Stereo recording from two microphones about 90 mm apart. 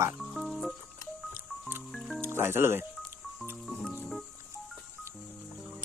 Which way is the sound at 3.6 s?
10° left (ahead or behind).